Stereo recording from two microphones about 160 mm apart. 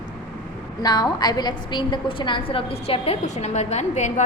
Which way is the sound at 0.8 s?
25° left (ahead or behind).